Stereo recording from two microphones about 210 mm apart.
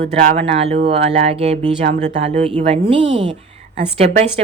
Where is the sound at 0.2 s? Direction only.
30° right (ahead or behind).